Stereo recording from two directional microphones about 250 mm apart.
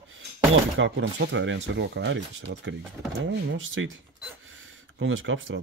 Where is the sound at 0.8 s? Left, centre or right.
Right.